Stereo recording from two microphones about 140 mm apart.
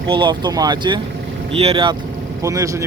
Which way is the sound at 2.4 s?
20° right (ahead or behind).